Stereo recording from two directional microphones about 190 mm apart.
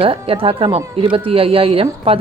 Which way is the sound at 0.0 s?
30° right (ahead or behind).